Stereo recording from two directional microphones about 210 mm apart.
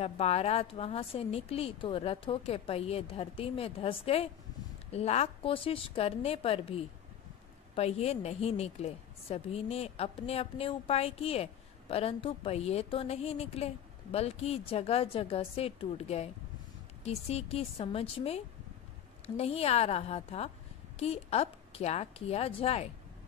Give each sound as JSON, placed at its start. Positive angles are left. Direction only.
{"t": 0.0, "sound": "a woman's voice", "side_deg": 30}